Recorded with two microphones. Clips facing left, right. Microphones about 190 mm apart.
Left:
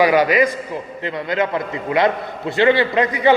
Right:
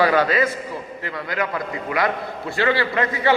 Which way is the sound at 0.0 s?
15° left (ahead or behind).